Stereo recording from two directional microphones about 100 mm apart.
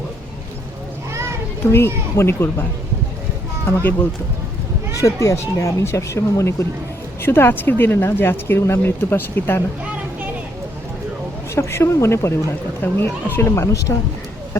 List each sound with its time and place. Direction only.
1.6 s speech: 25° left (ahead or behind)
4.9 s speech: 30° left (ahead or behind)
11.5 s speech: 30° left (ahead or behind)